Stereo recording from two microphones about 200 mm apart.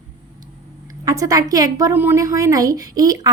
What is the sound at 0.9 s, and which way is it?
Speech, 15° right (ahead or behind).